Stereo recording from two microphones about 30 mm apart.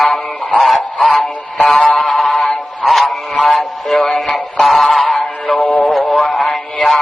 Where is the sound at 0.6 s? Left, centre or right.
Centre.